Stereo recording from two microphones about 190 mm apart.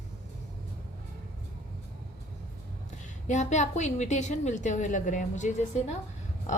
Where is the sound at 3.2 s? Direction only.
40° left (ahead or behind).